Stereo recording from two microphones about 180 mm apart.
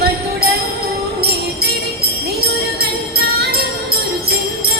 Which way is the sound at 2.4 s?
60° right (ahead or behind).